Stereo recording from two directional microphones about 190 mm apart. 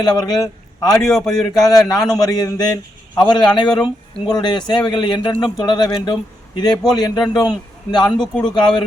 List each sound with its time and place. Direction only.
0.0 s a man's voice: 20° left (ahead or behind)
1.0 s a man's voice: centre (ahead or behind)
1.5 s speech: 20° left (ahead or behind)